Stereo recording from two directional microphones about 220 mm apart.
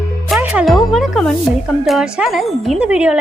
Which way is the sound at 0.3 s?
5° right (ahead or behind).